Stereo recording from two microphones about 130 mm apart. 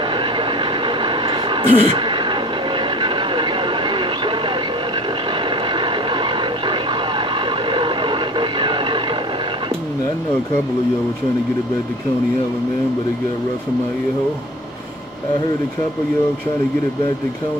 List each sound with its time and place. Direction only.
0.1 s vehicle: 40° right (ahead or behind)
5.5 s vehicle: 40° right (ahead or behind)